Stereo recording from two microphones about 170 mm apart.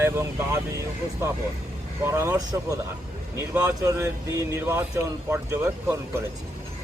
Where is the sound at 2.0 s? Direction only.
15° right (ahead or behind).